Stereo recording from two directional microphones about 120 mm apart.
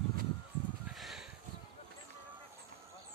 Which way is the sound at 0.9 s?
Centre (ahead or behind).